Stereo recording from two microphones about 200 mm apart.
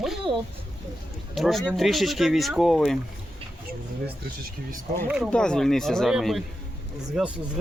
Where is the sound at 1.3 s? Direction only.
Centre (ahead or behind).